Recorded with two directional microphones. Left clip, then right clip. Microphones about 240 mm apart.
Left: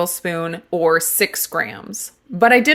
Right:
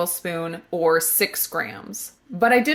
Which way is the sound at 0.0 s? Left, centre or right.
Left.